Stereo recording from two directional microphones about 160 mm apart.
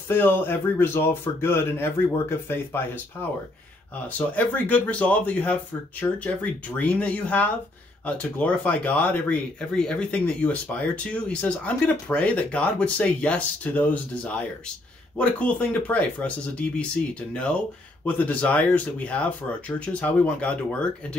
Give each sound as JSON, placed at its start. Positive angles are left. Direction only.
{"t": 0.1, "sound": "speech", "side_deg": 15}
{"t": 4.4, "sound": "speech", "side_deg": 10}